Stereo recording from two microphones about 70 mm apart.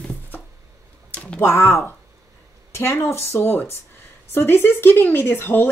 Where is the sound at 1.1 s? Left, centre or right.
Centre.